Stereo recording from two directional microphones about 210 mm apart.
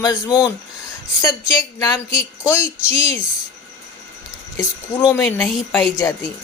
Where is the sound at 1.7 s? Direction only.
15° left (ahead or behind).